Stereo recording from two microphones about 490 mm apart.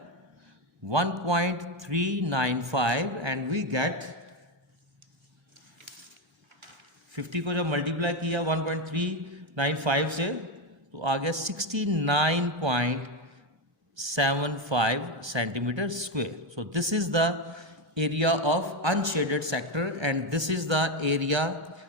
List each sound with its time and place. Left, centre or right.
0.9 s a man's voice: right
7.2 s a man's voice: right